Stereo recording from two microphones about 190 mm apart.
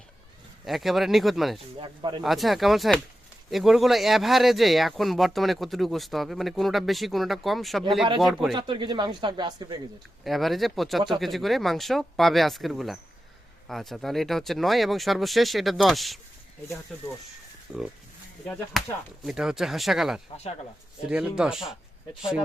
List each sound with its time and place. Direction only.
0.6 s speech: centre (ahead or behind)
1.8 s speech: 25° right (ahead or behind)
2.2 s speech: centre (ahead or behind)
8.5 s speech: 25° right (ahead or behind)
10.2 s speech: centre (ahead or behind)
18.4 s speech: 5° left (ahead or behind)
19.2 s speech: 5° right (ahead or behind)